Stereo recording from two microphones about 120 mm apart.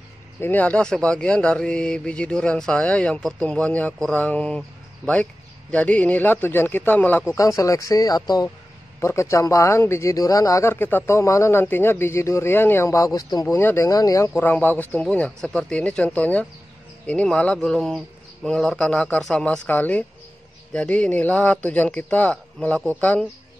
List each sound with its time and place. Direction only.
0.4 s speech: 15° left (ahead or behind)
7.3 s speech: 25° left (ahead or behind)
14.3 s speech: 15° left (ahead or behind)